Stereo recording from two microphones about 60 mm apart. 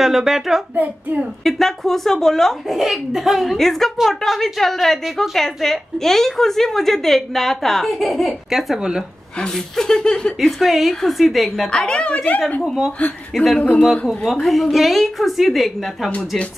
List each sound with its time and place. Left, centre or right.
0.0 s speech: centre
8.7 s speech: centre
9.4 s speech: centre
10.6 s speech: centre
11.7 s speech: centre
13.3 s speech: centre
13.6 s speech: centre
14.0 s speech: centre
16.1 s speech: centre